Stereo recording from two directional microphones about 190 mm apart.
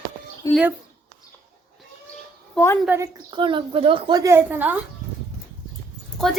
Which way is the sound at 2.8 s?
15° right (ahead or behind).